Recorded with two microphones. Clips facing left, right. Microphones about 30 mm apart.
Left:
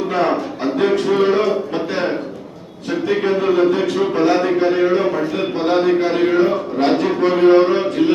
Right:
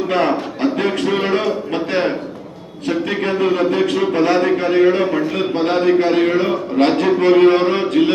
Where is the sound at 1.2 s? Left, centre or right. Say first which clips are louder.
Left 3 dB; right.